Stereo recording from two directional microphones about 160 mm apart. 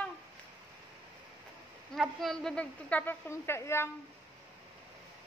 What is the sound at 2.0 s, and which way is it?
A woman's voice, centre (ahead or behind).